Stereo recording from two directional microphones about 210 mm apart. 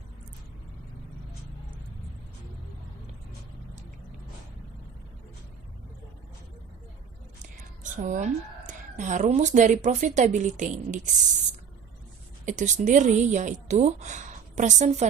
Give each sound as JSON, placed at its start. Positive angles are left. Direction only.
{"t": 7.9, "sound": "speech", "side_deg": -35}
{"t": 12.5, "sound": "speech", "side_deg": -35}